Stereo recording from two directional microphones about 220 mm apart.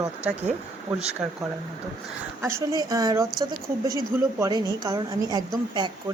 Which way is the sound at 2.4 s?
15° right (ahead or behind).